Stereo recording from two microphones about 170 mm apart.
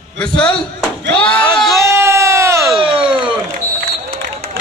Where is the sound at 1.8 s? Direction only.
15° right (ahead or behind).